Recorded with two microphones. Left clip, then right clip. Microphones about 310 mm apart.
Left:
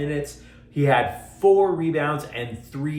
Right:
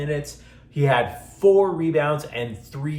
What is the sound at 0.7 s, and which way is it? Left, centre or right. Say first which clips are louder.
A man's voice: left 1 dB; centre.